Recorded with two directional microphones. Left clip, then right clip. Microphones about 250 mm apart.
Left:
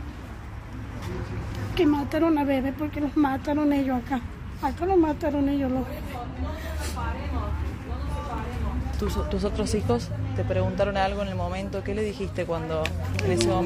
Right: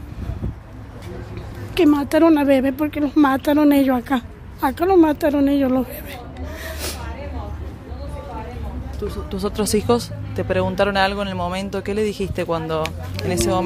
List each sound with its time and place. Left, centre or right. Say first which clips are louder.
1.8 s a woman's voice: right 8 dB; right
9.0 s speech: right 3 dB; left
9.6 s speech: right 11 dB; right